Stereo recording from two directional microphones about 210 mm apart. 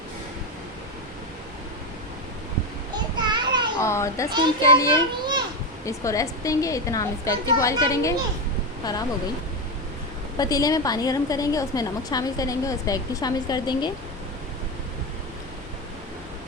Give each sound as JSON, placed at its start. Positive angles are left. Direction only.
{"t": 2.9, "sound": "a sound", "side_deg": -20}
{"t": 3.8, "sound": "a woman's voice", "side_deg": 15}
{"t": 4.3, "sound": "a child's voice", "side_deg": -20}
{"t": 4.6, "sound": "a woman's voice", "side_deg": 15}
{"t": 5.2, "sound": "children playing", "side_deg": -20}
{"t": 5.8, "sound": "a woman's voice", "side_deg": 15}
{"t": 10.3, "sound": "a woman's voice", "side_deg": 15}